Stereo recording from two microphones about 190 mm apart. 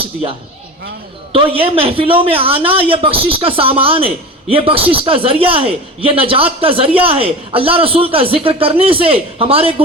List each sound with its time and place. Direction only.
0.0 s a man's voice: 30° right (ahead or behind)